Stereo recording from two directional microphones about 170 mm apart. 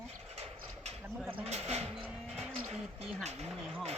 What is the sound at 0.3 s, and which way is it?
Horse, 40° right (ahead or behind).